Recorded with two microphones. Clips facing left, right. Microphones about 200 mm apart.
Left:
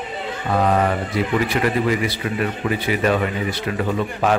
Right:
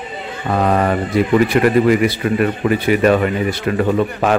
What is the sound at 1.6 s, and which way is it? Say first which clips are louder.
Speech: right 7 dB; 55° right (ahead or behind).